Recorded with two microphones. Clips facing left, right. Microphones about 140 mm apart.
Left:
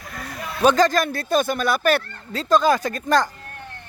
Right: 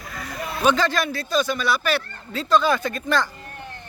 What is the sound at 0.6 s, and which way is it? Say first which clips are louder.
Speech: left 4 dB; 40° left (ahead or behind).